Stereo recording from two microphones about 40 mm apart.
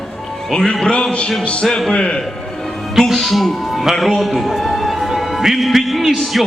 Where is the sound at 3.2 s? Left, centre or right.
Centre.